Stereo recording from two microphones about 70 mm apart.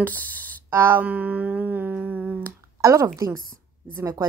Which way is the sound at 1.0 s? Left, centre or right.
Right.